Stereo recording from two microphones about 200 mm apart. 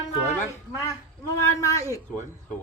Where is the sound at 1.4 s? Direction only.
15° left (ahead or behind).